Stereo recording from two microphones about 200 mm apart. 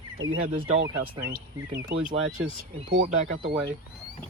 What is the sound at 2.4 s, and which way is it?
Speech, 90° right.